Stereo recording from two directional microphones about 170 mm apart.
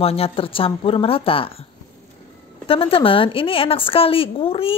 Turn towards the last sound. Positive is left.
turn(degrees=35)  # may be behind; listen again after turning